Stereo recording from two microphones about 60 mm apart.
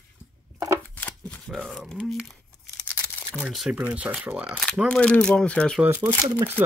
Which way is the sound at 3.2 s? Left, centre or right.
Left.